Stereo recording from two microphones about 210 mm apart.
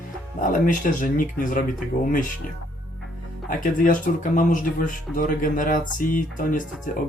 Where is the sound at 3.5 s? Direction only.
40° left (ahead or behind).